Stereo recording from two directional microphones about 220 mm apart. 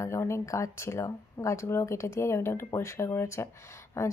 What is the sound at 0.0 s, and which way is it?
Speech, 10° left (ahead or behind).